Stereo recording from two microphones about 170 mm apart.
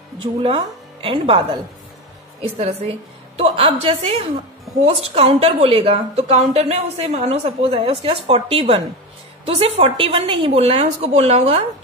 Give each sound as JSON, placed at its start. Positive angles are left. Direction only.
{"t": 0.2, "sound": "a woman's voice", "side_deg": -35}
{"t": 3.3, "sound": "a woman's voice", "side_deg": -35}